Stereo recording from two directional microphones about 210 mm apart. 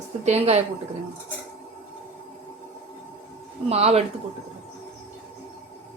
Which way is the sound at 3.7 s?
30° right (ahead or behind).